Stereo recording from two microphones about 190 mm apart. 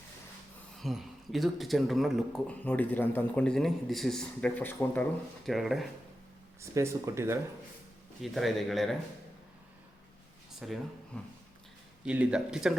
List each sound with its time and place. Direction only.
0.8 s speech: centre (ahead or behind)
6.6 s speech: 15° right (ahead or behind)
8.2 s speech: centre (ahead or behind)
10.6 s speech: centre (ahead or behind)